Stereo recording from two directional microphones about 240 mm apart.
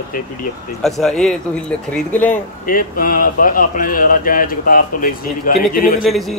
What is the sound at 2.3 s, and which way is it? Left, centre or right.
A man's voice, left.